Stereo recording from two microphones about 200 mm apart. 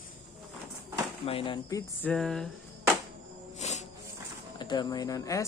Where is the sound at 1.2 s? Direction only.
25° left (ahead or behind).